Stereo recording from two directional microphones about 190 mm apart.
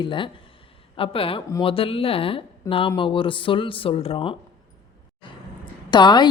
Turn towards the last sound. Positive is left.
turn(degrees=25)  # may be behind; listen again after turning